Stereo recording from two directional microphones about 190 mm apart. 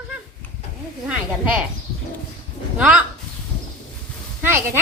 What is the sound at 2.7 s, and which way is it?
Speech, 5° right (ahead or behind).